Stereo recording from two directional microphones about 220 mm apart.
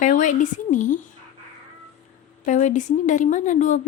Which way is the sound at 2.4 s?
35° left (ahead or behind).